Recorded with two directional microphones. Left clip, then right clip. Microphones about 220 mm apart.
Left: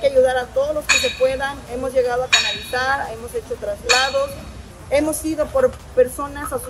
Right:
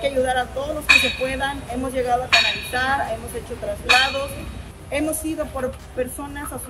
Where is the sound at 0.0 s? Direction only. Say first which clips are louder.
Left 5 dB; 20° left (ahead or behind).